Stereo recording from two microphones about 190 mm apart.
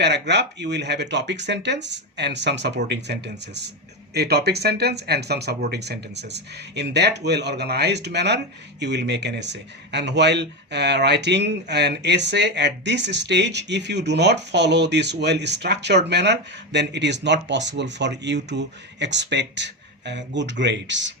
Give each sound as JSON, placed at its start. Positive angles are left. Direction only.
{"t": 0.0, "sound": "speech", "side_deg": -65}